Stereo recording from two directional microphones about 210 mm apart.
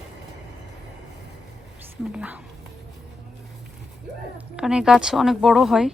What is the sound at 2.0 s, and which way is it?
Speech, 5° right (ahead or behind).